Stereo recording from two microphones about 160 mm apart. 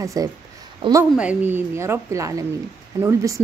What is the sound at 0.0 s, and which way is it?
Speech, 20° right (ahead or behind).